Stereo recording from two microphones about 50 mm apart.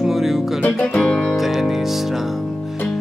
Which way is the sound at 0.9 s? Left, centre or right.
Centre.